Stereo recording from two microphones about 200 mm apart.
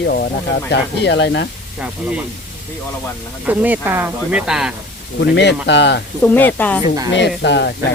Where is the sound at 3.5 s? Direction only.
10° right (ahead or behind).